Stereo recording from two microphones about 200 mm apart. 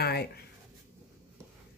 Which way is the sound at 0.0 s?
55° left (ahead or behind).